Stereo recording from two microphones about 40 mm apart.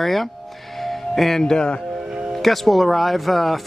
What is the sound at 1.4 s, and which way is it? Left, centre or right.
Speech, centre.